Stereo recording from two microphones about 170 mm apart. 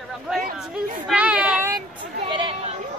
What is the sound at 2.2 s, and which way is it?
Chatter, 30° right (ahead or behind).